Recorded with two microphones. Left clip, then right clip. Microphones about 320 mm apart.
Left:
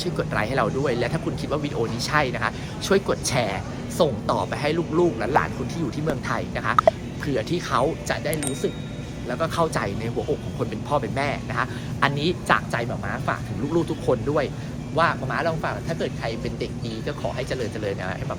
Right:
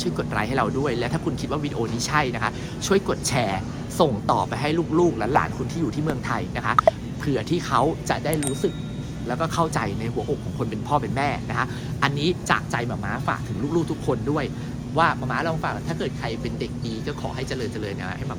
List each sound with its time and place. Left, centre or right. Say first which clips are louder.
0.0 s speech: left 1 dB; centre